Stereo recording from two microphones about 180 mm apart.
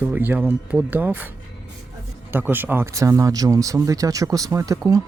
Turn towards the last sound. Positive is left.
turn(degrees=-20)  # may be behind; listen again after turning